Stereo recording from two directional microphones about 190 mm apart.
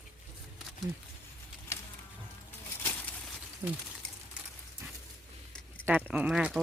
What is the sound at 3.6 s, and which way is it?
Speech, 10° right (ahead or behind).